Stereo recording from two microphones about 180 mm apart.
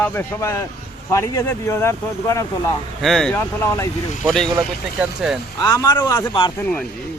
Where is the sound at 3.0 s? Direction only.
Centre (ahead or behind).